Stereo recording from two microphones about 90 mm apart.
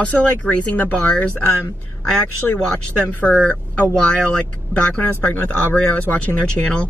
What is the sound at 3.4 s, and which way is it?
Speech, 10° left (ahead or behind).